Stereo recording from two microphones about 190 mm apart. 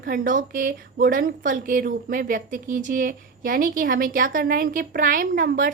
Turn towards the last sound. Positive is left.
turn(degrees=-45)  # may be behind; listen again after turning